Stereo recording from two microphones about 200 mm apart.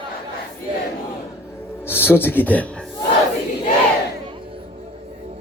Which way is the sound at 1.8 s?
10° left (ahead or behind).